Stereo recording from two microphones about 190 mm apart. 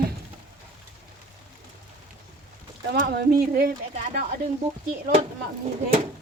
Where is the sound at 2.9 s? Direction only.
55° right (ahead or behind).